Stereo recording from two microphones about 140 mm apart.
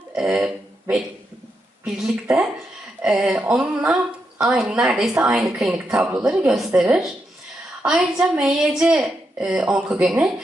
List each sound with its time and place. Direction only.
0.2 s speech: 5° right (ahead or behind)
2.2 s a woman's voice: 10° right (ahead or behind)